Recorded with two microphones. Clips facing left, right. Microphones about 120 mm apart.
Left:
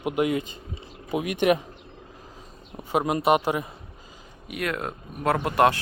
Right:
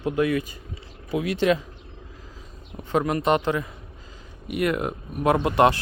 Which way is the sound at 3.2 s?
10° left (ahead or behind).